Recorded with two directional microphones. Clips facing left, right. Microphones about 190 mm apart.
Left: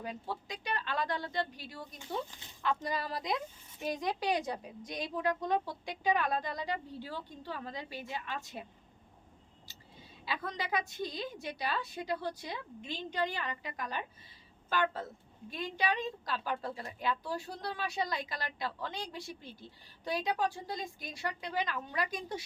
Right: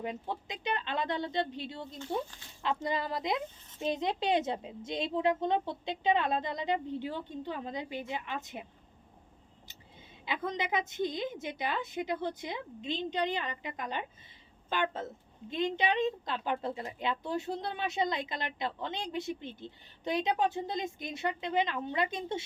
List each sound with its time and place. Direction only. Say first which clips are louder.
0.0 s speech: right 3 dB; 20° right (ahead or behind)
10.2 s speech: right 4 dB; 20° right (ahead or behind)